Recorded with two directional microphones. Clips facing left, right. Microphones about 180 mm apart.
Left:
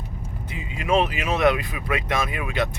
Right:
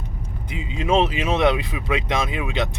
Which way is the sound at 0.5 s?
20° right (ahead or behind).